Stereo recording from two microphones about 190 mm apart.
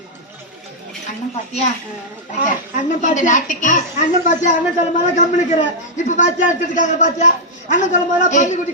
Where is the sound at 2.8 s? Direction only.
40° left (ahead or behind).